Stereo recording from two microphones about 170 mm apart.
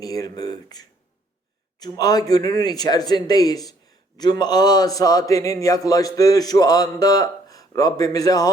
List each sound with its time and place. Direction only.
0.0 s a man's voice: 20° left (ahead or behind)